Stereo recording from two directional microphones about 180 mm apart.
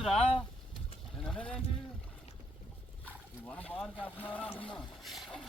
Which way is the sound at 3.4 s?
5° left (ahead or behind).